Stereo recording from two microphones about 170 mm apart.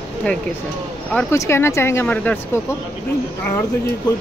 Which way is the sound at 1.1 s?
5° left (ahead or behind).